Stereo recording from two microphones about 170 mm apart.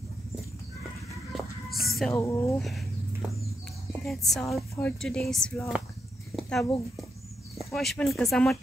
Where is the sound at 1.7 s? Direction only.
60° left (ahead or behind).